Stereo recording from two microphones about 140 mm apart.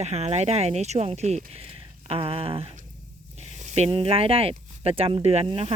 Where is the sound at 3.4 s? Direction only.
55° right (ahead or behind).